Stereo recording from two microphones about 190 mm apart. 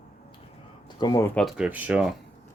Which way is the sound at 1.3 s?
Centre (ahead or behind).